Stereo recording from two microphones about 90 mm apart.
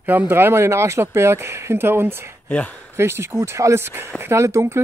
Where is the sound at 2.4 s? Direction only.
15° left (ahead or behind).